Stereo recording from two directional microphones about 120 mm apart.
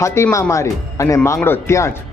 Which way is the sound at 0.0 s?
25° left (ahead or behind).